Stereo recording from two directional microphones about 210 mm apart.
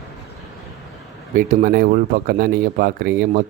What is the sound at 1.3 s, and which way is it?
Speech, 40° right (ahead or behind).